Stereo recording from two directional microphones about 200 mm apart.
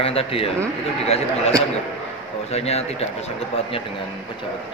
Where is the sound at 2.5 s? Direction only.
30° left (ahead or behind).